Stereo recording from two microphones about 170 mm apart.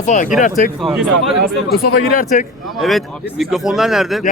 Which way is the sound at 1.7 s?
55° left (ahead or behind).